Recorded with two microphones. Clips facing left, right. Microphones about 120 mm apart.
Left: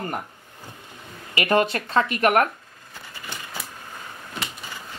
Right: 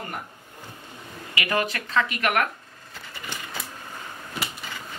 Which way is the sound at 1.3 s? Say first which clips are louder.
Left 6 dB; 35° left (ahead or behind).